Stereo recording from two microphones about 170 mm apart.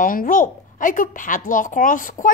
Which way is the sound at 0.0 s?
55° left (ahead or behind).